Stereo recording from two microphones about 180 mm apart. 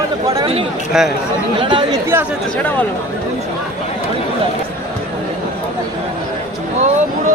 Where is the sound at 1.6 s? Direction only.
25° right (ahead or behind).